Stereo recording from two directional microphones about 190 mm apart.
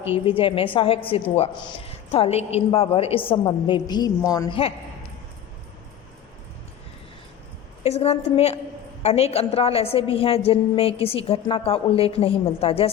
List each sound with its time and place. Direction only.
0.1 s a woman's voice: 25° left (ahead or behind)
7.9 s a woman's voice: 35° left (ahead or behind)